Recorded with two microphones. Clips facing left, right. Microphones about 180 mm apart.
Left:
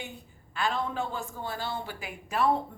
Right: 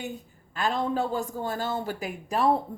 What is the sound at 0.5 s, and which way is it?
A man's voice, 40° right (ahead or behind).